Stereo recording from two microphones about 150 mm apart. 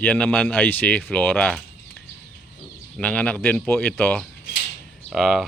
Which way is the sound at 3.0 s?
10° left (ahead or behind).